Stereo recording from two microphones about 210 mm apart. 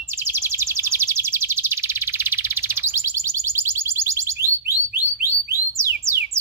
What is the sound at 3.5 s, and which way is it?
Music, 10° right (ahead or behind).